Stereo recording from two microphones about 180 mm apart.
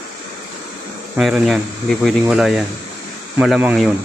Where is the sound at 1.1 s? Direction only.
Centre (ahead or behind).